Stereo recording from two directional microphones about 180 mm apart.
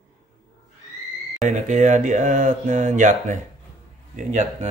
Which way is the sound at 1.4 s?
45° right (ahead or behind).